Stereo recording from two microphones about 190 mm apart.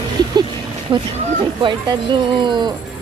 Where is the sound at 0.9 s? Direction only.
25° right (ahead or behind).